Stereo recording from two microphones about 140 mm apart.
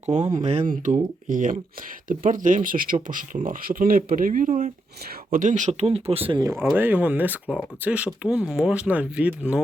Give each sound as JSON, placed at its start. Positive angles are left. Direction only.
{"t": 0.0, "sound": "speech", "side_deg": -55}
{"t": 0.7, "sound": "speech", "side_deg": -70}
{"t": 2.6, "sound": "speech", "side_deg": -85}
{"t": 6.4, "sound": "speech", "side_deg": -20}